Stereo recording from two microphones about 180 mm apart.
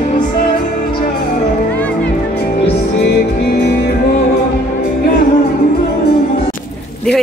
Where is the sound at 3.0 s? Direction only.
60° left (ahead or behind).